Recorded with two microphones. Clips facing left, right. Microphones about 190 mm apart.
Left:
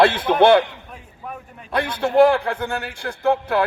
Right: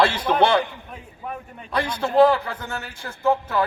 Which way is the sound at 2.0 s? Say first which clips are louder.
Left 2 dB; 70° left (ahead or behind).